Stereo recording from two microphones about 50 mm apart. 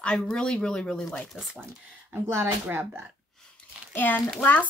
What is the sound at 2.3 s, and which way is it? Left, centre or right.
Speech, right.